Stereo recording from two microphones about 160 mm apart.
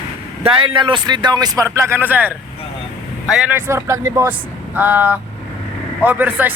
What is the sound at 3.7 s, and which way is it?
Speech, 15° right (ahead or behind).